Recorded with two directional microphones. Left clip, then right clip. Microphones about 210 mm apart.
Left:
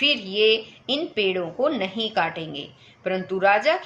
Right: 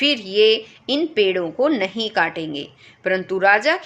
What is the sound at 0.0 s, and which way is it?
A woman's voice, 50° right (ahead or behind).